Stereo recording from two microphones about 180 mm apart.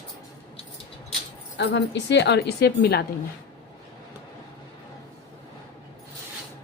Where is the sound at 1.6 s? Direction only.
75° left (ahead or behind).